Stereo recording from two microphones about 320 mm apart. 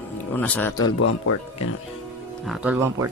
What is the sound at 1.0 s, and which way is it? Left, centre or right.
Speech, left.